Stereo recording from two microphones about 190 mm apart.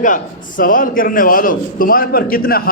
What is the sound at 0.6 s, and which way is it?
A man's voice, 45° left (ahead or behind).